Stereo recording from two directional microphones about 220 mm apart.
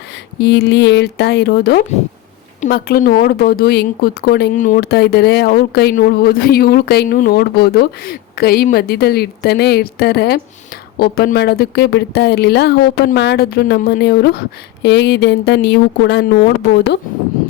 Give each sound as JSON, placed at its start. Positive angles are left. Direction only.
{"t": 0.3, "sound": "speech", "side_deg": 50}